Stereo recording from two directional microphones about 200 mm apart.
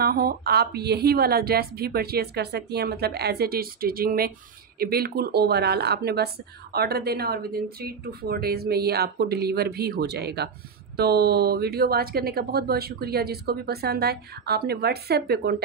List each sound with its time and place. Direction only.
0.0 s speech: 50° right (ahead or behind)